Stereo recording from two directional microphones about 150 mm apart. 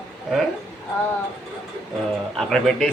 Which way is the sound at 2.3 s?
5° left (ahead or behind).